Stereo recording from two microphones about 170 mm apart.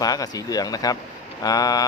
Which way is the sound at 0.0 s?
20° left (ahead or behind).